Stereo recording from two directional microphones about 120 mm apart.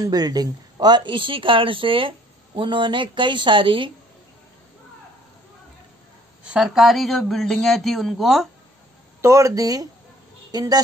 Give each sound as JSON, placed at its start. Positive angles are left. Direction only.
{"t": 0.0, "sound": "speech", "side_deg": -30}
{"t": 6.4, "sound": "a man's voice", "side_deg": -5}
{"t": 9.2, "sound": "speech", "side_deg": -25}